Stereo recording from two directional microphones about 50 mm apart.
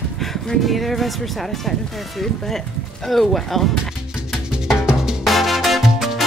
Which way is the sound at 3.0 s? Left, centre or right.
Centre.